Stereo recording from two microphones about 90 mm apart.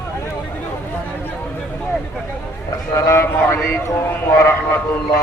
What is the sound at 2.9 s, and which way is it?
A man's voice, 30° left (ahead or behind).